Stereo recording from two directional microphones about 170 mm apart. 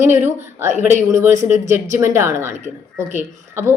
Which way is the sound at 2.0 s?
15° right (ahead or behind).